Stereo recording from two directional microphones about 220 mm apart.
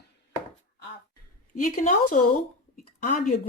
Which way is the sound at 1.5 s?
35° left (ahead or behind).